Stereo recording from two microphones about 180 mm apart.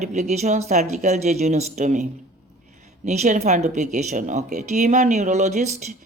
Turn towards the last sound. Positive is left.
turn(degrees=-40)  # may be behind; listen again after turning